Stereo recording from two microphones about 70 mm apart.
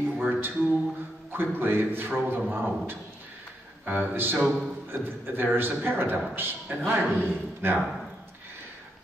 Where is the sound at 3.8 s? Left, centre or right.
Right.